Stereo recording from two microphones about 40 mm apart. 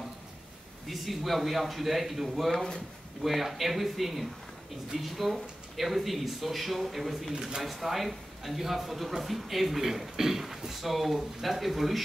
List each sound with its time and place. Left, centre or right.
0.8 s speech: centre
2.5 s speech: centre
3.2 s speech: centre
7.3 s speech: centre
7.6 s speech: centre